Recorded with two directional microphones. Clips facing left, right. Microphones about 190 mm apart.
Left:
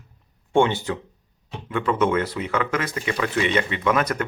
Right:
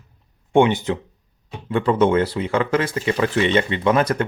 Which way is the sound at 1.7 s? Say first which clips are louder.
Right 4 dB; 35° right (ahead or behind).